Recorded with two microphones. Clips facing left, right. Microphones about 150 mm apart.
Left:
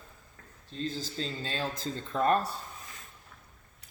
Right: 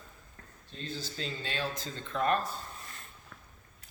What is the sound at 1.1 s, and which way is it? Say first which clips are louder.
Speech: left 2 dB; 35° left (ahead or behind).